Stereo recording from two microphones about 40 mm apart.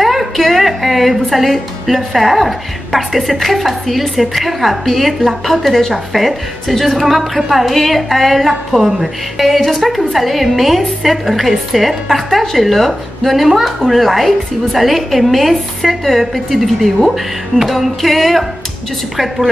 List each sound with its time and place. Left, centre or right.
0.0 s a woman's voice: centre